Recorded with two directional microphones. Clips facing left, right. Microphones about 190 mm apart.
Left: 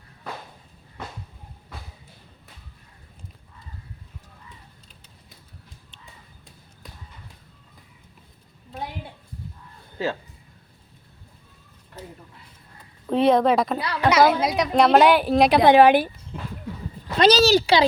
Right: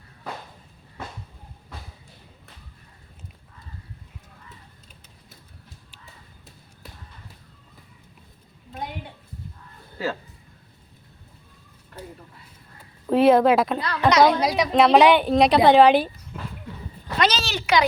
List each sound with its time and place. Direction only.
13.1 s a woman's voice: 5° right (ahead or behind)
13.7 s a woman's voice: 10° left (ahead or behind)
17.2 s speech: 35° left (ahead or behind)